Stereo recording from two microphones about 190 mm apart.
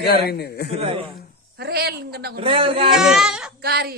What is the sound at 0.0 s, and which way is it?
Speech, 55° left (ahead or behind).